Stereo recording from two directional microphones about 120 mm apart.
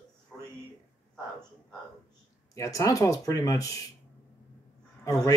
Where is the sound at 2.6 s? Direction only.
25° left (ahead or behind).